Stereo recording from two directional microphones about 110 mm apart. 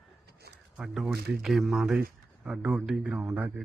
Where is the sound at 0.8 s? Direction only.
5° right (ahead or behind).